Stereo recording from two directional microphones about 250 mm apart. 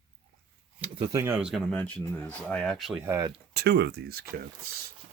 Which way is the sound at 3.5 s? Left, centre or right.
Right.